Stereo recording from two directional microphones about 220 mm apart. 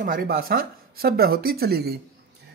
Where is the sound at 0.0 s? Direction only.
40° right (ahead or behind).